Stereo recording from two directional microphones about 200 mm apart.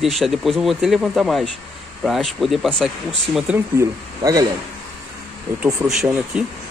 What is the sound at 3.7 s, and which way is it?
Speech, 15° right (ahead or behind).